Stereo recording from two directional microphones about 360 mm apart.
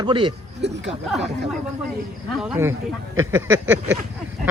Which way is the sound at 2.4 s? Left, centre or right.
Centre.